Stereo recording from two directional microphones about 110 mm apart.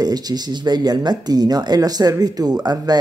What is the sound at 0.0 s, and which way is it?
Speech, 35° right (ahead or behind).